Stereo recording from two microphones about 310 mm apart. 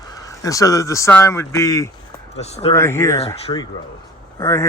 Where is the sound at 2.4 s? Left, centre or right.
Left.